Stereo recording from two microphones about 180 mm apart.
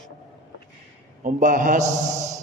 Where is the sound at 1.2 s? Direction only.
50° right (ahead or behind).